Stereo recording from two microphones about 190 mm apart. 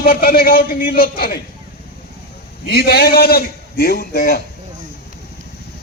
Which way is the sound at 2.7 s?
55° left (ahead or behind).